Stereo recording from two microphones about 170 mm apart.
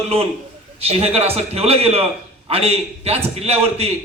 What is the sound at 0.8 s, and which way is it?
A man's voice, 35° right (ahead or behind).